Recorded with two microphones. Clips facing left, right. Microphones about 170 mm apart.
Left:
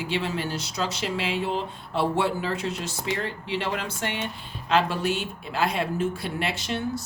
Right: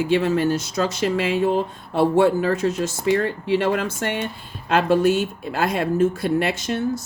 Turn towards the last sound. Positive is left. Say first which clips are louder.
# right 5 dB
turn(degrees=-45)  # may be behind; listen again after turning